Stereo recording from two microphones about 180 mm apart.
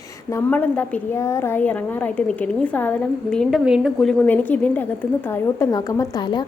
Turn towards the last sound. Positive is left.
turn(degrees=25)  # may be behind; listen again after turning